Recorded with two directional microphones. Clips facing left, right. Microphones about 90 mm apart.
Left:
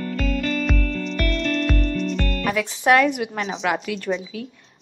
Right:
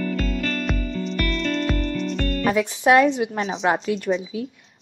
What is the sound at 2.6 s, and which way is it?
A woman's voice, 15° right (ahead or behind).